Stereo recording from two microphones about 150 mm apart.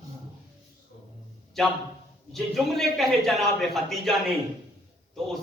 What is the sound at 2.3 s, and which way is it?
A man's voice, centre (ahead or behind).